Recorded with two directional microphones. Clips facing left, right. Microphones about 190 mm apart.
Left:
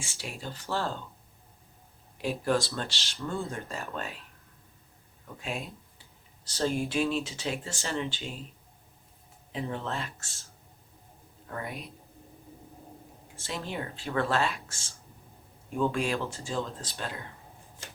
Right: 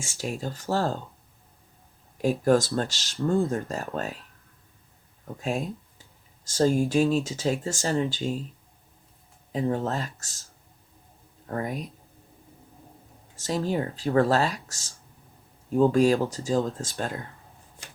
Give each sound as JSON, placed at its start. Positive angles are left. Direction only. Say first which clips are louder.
{"t": 0.0, "sound": "speech", "louder": "right 8 dB", "side_deg": -45}
{"t": 2.1, "sound": "speech", "louder": "right 7 dB", "side_deg": -45}
{"t": 5.4, "sound": "speech", "louder": "right 8 dB", "side_deg": -45}
{"t": 9.5, "sound": "speech", "louder": "right 7 dB", "side_deg": -40}
{"t": 11.4, "sound": "speech", "louder": "right 7 dB", "side_deg": -40}
{"t": 13.3, "sound": "speech", "louder": "right 9 dB", "side_deg": -40}